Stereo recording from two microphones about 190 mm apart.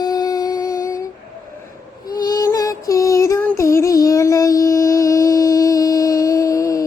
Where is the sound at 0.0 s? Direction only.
20° left (ahead or behind).